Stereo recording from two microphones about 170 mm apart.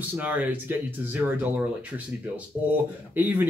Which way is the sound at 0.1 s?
10° right (ahead or behind).